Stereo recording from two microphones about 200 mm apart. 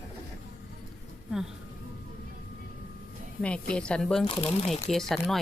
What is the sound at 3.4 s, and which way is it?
Speech, 5° left (ahead or behind).